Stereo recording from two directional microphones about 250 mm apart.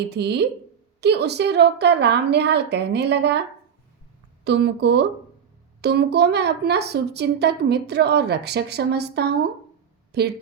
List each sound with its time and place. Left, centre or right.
0.1 s a woman's voice: right
4.4 s a woman's voice: right